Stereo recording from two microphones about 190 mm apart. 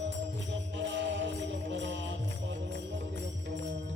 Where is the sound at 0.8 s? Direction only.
70° right (ahead or behind).